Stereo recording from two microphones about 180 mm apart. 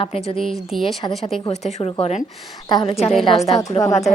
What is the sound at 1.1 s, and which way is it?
A woman's voice, 30° left (ahead or behind).